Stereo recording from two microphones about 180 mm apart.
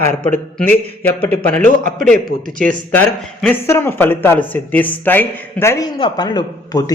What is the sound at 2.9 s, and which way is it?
A man's voice, 10° left (ahead or behind).